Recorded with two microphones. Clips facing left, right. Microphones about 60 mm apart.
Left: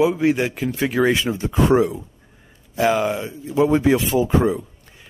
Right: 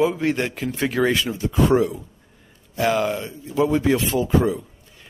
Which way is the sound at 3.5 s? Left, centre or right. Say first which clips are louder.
Left 3 dB; left.